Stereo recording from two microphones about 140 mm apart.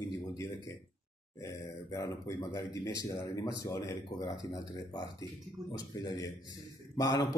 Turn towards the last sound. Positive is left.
turn(degrees=25)  # may be behind; listen again after turning